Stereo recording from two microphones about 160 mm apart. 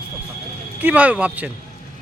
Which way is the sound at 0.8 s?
10° right (ahead or behind).